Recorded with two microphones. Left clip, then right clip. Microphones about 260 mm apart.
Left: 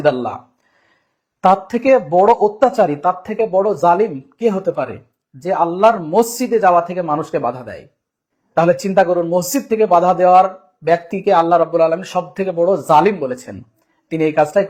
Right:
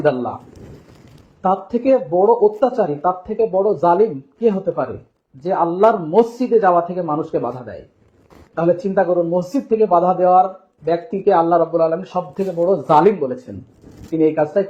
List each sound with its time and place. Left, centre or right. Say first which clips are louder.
0.0 s speech: left 2 dB; left
1.4 s speech: left 5 dB; left